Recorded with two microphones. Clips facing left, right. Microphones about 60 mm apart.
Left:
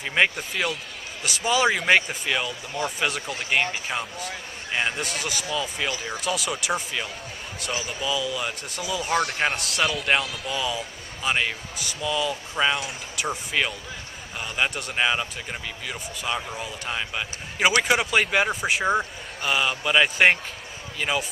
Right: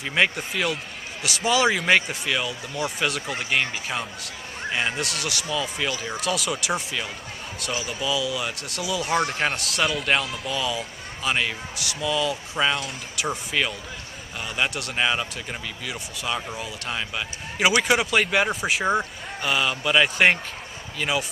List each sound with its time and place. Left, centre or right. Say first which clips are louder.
0.0 s speech: even; centre
9.1 s a man's voice: even; centre
9.4 s speech: even; centre